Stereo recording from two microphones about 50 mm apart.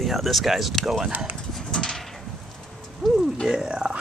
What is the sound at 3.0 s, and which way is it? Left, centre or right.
Music, centre.